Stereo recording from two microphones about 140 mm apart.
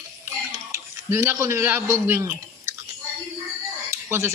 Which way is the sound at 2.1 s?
20° right (ahead or behind).